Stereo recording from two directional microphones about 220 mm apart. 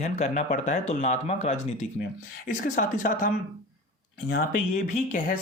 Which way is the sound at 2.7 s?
35° left (ahead or behind).